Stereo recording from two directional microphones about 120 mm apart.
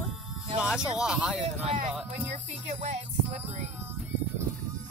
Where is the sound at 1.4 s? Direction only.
55° right (ahead or behind).